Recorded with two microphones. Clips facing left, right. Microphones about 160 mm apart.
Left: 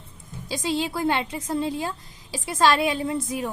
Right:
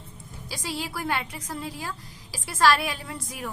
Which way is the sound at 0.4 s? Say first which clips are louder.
Left 8 dB; 20° left (ahead or behind).